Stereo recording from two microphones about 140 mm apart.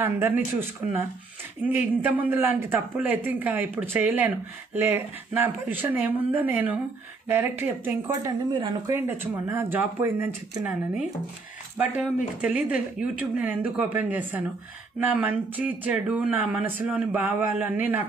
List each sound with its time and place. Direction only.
0.0 s speech: 15° right (ahead or behind)
8.5 s speech: 35° right (ahead or behind)
8.9 s speech: 15° right (ahead or behind)
11.8 s speech: 10° right (ahead or behind)